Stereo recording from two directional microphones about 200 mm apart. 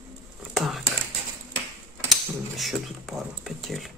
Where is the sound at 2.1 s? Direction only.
Centre (ahead or behind).